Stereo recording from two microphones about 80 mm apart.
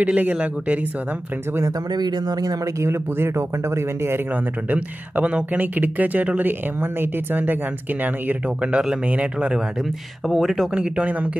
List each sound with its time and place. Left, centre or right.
0.0 s speech: centre
1.9 s speech: right
2.6 s a man's voice: right
4.6 s speech: centre
8.7 s speech: centre
10.2 s speech: centre